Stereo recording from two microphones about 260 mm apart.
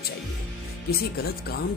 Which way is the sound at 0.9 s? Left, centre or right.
Left.